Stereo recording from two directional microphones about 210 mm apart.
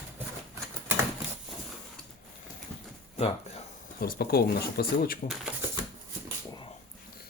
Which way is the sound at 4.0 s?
45° left (ahead or behind).